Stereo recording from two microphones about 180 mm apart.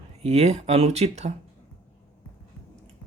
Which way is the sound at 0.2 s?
35° right (ahead or behind).